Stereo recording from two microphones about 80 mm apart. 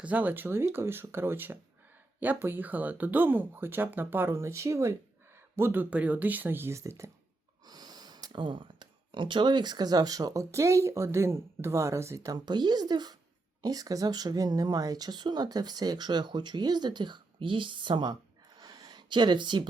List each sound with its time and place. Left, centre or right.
0.0 s speech: centre; by 4.9 s right
5.5 s speech: right
7.7 s speech: right
12.5 s speech: right
18.1 s a sound: right